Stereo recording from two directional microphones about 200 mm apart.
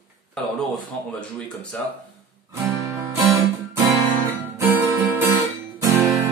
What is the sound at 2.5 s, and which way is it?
Music, 15° right (ahead or behind).